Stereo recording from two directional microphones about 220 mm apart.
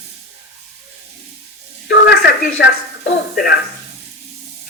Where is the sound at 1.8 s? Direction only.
50° left (ahead or behind).